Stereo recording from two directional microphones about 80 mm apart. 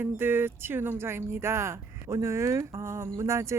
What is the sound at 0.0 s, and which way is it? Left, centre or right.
Speech, right.